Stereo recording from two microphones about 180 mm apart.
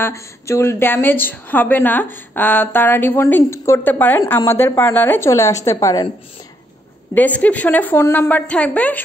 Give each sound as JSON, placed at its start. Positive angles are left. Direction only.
{"t": 0.0, "sound": "a woman's voice", "side_deg": 15}
{"t": 7.2, "sound": "a woman's voice", "side_deg": 10}